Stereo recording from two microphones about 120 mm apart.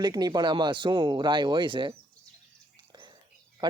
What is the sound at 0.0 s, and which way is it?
Speech, 35° right (ahead or behind).